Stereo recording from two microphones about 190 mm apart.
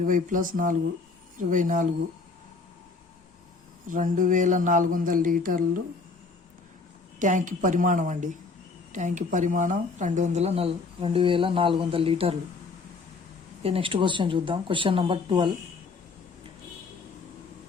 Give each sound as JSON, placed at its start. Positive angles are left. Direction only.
{"t": 0.0, "sound": "speech", "side_deg": -45}
{"t": 3.8, "sound": "speech", "side_deg": -45}
{"t": 7.2, "sound": "speech", "side_deg": -40}
{"t": 13.6, "sound": "speech", "side_deg": -30}